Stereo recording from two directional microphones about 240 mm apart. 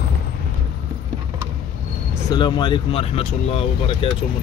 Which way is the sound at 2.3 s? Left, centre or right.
Centre.